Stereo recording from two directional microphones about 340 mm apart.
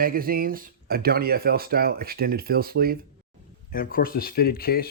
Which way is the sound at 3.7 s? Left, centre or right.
Left.